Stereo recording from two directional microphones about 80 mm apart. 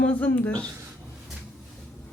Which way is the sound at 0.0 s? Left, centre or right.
Centre.